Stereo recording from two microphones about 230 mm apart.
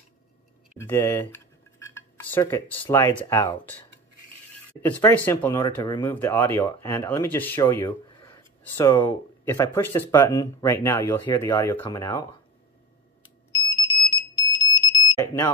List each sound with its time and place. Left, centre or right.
0.7 s speech: centre
2.0 s cutlery: centre
2.9 s speech: centre
4.8 s speech: centre
13.5 s alarm: centre